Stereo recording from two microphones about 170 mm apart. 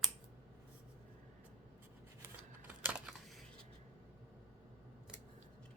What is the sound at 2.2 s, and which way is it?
Scissors, 10° right (ahead or behind).